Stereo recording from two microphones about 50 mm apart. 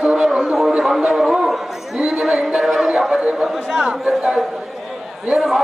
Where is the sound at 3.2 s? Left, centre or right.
Centre.